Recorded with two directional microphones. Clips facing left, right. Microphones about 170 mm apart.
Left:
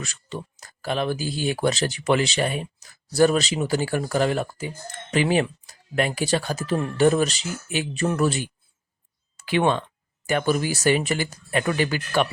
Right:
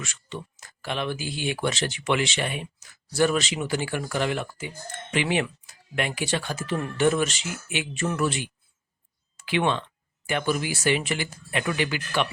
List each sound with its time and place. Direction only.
0.0 s speech: 35° left (ahead or behind)